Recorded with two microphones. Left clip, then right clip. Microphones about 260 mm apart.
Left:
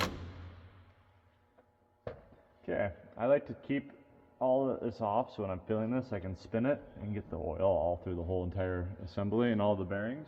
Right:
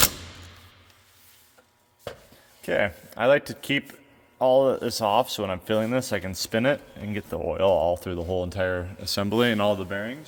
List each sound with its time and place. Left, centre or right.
2.6 s speech: right